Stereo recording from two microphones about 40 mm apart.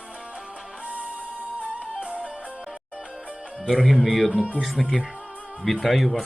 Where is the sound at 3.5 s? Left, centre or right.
Centre.